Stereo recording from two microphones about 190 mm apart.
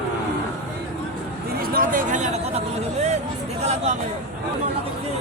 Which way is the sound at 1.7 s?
45° right (ahead or behind).